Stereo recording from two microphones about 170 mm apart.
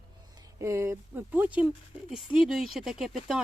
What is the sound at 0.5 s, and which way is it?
Speech, 15° right (ahead or behind).